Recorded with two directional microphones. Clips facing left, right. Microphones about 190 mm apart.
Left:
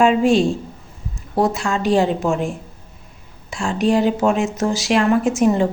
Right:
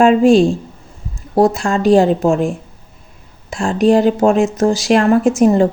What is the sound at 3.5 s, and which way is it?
Speech, 50° right (ahead or behind).